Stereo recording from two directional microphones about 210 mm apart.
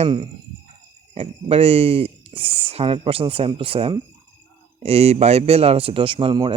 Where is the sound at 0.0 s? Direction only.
25° right (ahead or behind).